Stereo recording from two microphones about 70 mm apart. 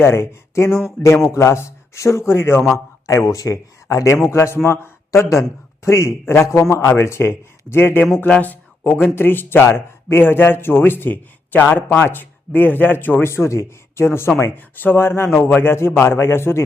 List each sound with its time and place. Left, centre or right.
0.0 s a man's voice: left
4.3 s speech: left